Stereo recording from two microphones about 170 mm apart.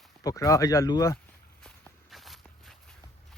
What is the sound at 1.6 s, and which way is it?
Walk, centre (ahead or behind).